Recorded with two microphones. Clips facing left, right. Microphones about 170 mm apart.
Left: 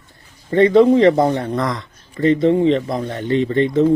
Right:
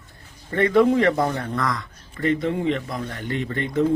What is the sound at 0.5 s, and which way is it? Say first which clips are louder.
Speech: left 6 dB; 20° left (ahead or behind).